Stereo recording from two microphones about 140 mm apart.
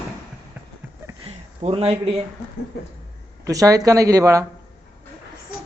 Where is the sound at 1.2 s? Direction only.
45° right (ahead or behind).